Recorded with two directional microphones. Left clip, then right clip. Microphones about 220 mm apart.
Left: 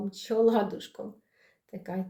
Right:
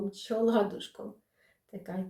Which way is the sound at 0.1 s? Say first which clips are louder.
Left 5 dB; 40° left (ahead or behind).